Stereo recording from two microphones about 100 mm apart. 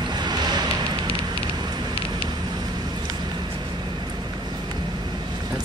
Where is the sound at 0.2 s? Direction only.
45° right (ahead or behind).